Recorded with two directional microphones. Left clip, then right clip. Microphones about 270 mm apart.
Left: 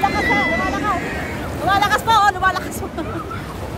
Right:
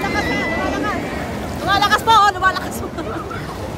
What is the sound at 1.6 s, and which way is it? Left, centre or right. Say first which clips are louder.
Speech: right 1 dB; centre.